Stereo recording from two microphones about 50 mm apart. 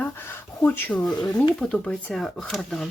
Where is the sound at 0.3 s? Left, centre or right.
Left.